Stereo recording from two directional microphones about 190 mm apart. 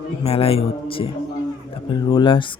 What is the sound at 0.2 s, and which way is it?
Speech, 30° left (ahead or behind).